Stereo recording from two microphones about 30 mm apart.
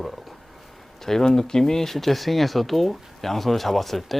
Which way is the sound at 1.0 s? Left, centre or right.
Centre.